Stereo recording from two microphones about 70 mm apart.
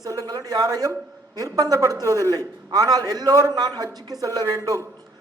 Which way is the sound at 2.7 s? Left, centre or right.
Right.